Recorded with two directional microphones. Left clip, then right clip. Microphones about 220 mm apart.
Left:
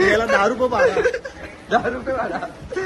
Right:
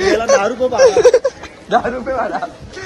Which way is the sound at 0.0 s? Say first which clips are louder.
Right 3 dB; centre (ahead or behind).